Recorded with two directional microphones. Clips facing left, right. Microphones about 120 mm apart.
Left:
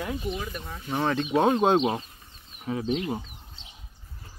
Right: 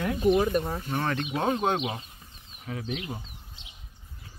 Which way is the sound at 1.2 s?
30° left (ahead or behind).